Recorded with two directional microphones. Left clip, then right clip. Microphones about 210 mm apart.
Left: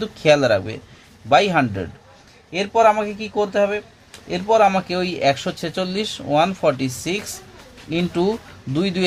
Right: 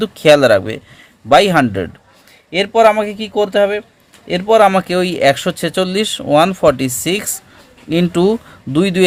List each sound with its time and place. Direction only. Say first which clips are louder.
0.0 s speech: right 7 dB; 40° right (ahead or behind)